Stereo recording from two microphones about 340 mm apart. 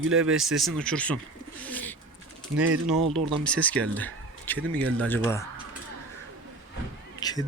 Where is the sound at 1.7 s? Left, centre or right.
Centre.